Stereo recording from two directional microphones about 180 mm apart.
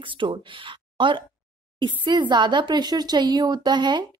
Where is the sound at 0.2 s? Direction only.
25° right (ahead or behind).